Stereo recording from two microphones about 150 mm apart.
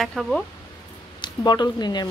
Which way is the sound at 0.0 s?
Centre (ahead or behind).